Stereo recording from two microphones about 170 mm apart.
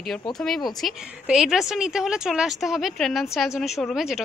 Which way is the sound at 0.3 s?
Centre (ahead or behind).